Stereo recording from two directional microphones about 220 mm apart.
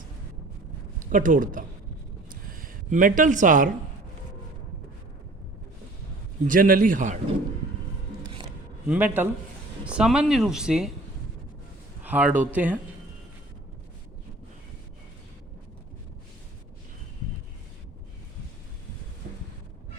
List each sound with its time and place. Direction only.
1.1 s speech: 35° right (ahead or behind)
6.5 s speech: 40° right (ahead or behind)
8.9 s speech: 10° right (ahead or behind)
12.0 s speech: 5° right (ahead or behind)